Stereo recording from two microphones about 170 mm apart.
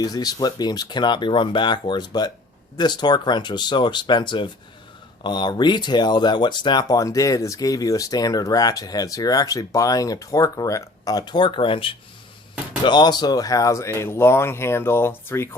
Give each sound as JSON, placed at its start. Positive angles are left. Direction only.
{"t": 0.0, "sound": "speech", "side_deg": 20}